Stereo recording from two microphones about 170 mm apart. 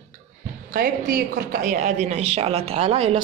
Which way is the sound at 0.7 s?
65° right (ahead or behind).